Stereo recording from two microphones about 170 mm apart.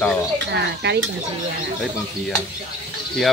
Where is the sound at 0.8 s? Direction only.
80° right.